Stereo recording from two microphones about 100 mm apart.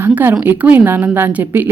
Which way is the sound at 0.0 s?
20° right (ahead or behind).